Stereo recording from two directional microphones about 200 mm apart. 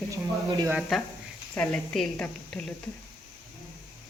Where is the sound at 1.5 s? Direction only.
5° left (ahead or behind).